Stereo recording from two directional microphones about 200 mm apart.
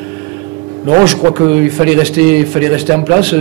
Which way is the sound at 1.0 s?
15° right (ahead or behind).